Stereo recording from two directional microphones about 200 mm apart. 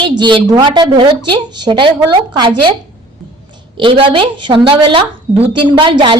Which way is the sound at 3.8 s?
25° right (ahead or behind).